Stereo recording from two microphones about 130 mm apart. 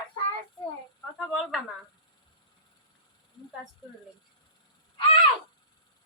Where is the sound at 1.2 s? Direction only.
Centre (ahead or behind).